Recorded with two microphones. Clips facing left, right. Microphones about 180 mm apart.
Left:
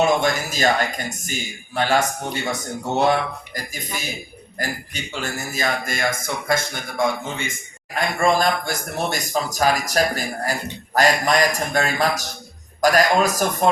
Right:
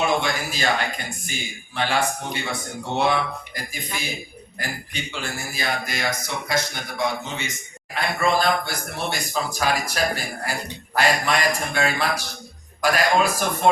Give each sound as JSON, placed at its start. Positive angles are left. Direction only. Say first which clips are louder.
{"t": 0.2, "sound": "a man's voice", "louder": "left 5 dB", "side_deg": 45}
{"t": 5.2, "sound": "a man's voice", "louder": "left 5 dB", "side_deg": 45}